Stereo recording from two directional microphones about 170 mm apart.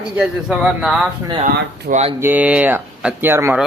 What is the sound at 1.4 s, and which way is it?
Speech, 45° right (ahead or behind).